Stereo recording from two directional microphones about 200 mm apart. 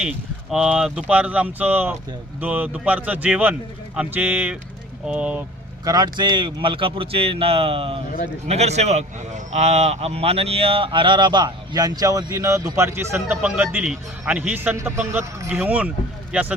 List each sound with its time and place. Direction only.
0.5 s speech: 5° right (ahead or behind)
5.8 s speech: 20° right (ahead or behind)